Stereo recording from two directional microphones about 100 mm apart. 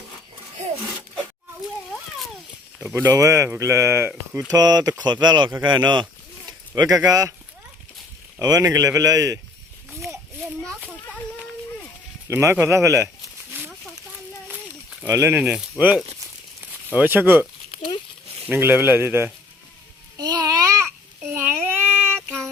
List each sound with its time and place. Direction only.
1.9 s a sound: centre (ahead or behind)
2.9 s a man's voice: 25° right (ahead or behind)
4.4 s speech: 40° right (ahead or behind)
6.7 s speech: 35° right (ahead or behind)
8.4 s speech: 35° right (ahead or behind)
9.9 s children playing: centre (ahead or behind)
12.3 s a man's voice: 25° right (ahead or behind)
15.0 s a man's voice: 25° right (ahead or behind)
15.4 s speech: 10° right (ahead or behind)
16.9 s a man's voice: 20° right (ahead or behind)
17.7 s a sound: 50° left (ahead or behind)
18.4 s a man's voice: 20° right (ahead or behind)
20.1 s babbling: 40° right (ahead or behind)
21.3 s a sound: 25° right (ahead or behind)